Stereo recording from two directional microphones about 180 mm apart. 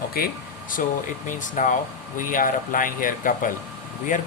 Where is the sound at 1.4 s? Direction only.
45° left (ahead or behind).